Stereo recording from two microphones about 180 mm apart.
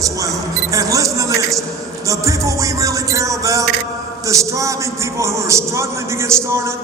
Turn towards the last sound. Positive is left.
turn(degrees=-15)  # may be behind; listen again after turning